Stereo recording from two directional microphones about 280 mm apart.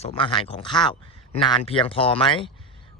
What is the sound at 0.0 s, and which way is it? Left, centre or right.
Speech, centre.